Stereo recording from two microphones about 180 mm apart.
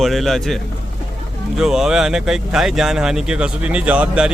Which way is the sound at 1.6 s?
5° right (ahead or behind).